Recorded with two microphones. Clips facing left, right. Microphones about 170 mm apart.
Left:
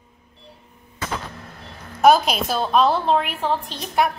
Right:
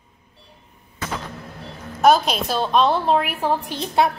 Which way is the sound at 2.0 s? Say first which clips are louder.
Left 1 dB; 5° left (ahead or behind).